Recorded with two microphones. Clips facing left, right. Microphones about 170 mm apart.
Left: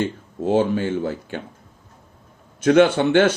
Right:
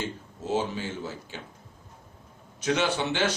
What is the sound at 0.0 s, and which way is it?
Speech, 55° left (ahead or behind).